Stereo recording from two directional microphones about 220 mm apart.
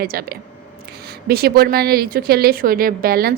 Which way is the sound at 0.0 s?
45° right (ahead or behind).